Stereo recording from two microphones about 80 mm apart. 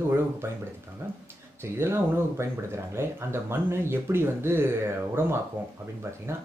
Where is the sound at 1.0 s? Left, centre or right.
Right.